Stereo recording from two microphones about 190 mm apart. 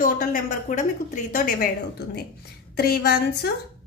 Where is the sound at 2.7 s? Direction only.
55° left (ahead or behind).